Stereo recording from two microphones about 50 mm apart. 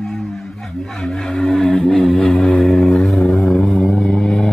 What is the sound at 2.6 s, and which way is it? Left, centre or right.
Vehicle, centre.